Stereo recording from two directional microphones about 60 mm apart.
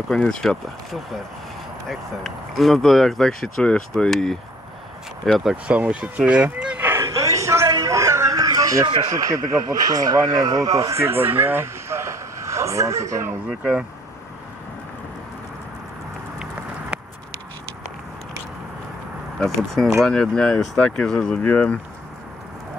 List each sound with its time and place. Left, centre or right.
0.1 s speech: centre
1.9 s speech: centre
5.2 s speech: centre
5.7 s speech: centre
7.0 s a sound: right
11.0 s a man's voice: right
13.5 s speech: centre
19.4 s speech: centre
21.4 s speech: left